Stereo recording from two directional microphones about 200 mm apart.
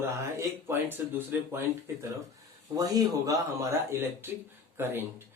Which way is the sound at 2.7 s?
20° right (ahead or behind).